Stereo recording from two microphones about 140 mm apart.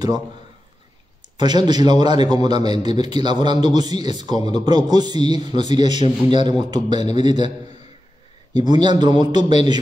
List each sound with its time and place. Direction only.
1.3 s speech: 30° right (ahead or behind)
8.5 s speech: 30° right (ahead or behind)